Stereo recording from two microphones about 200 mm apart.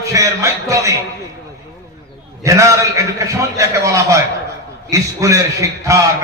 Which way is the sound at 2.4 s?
15° right (ahead or behind).